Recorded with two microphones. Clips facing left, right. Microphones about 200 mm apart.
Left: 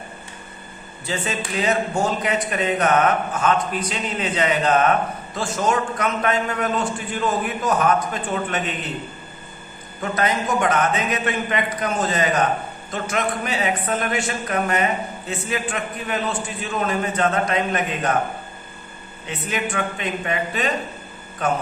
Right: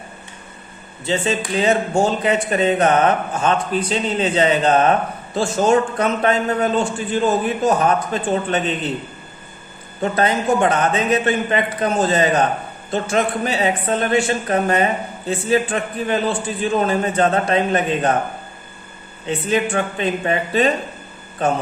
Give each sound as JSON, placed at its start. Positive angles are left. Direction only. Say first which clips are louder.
{"t": 1.0, "sound": "speech", "louder": "right 6 dB", "side_deg": -25}
{"t": 10.0, "sound": "a man's voice", "louder": "right 4 dB", "side_deg": -30}
{"t": 19.2, "sound": "a man's voice", "louder": "right 7 dB", "side_deg": -30}